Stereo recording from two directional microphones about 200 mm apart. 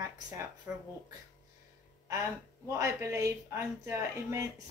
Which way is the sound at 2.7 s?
15° right (ahead or behind).